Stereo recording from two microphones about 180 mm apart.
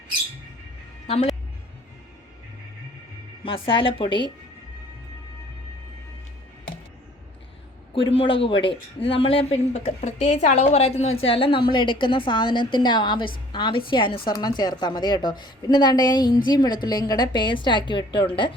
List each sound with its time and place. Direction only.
1.0 s speech: 35° left (ahead or behind)
3.4 s speech: 30° left (ahead or behind)
7.9 s speech: 30° left (ahead or behind)